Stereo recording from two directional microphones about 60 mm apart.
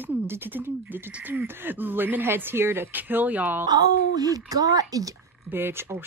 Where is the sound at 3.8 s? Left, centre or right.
Right.